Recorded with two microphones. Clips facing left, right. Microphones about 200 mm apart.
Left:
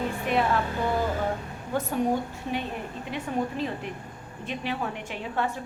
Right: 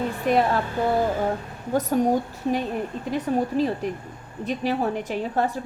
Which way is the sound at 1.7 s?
40° right (ahead or behind).